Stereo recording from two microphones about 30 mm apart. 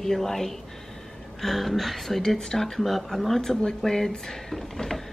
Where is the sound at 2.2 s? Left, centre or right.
Centre.